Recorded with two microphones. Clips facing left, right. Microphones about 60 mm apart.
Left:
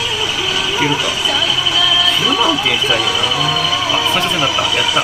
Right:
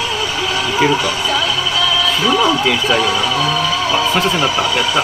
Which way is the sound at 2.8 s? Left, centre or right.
Right.